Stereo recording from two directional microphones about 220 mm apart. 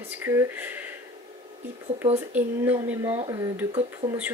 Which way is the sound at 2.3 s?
10° right (ahead or behind).